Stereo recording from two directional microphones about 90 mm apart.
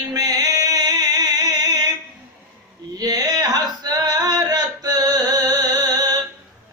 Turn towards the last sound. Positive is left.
turn(degrees=-45)  # may be behind; listen again after turning